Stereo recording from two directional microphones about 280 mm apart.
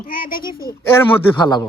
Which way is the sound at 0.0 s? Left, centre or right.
Left.